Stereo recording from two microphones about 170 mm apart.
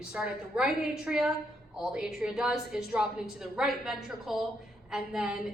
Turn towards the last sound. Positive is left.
turn(degrees=-5)  # may be behind; listen again after turning